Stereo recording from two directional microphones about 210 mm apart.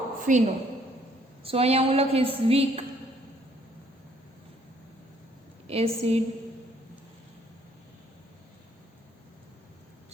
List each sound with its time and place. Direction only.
0.3 s a woman's voice: 35° right (ahead or behind)
5.6 s a woman's voice: 30° right (ahead or behind)